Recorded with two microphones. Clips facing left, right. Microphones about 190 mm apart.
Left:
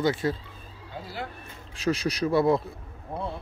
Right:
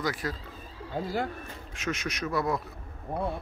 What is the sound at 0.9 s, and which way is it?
Speech, 45° right (ahead or behind).